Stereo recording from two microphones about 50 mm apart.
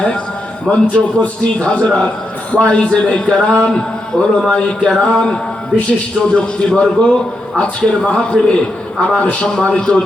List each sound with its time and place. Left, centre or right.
0.7 s a man's voice: left
4.5 s a sound: centre
6.3 s a man's voice: centre